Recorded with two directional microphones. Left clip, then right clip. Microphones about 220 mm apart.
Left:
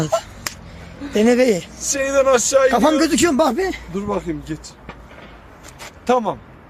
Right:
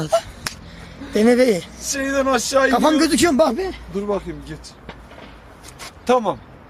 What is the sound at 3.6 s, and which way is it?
Speech, 45° left (ahead or behind).